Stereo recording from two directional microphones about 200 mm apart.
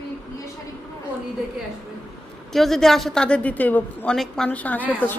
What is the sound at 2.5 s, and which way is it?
A woman's voice, centre (ahead or behind).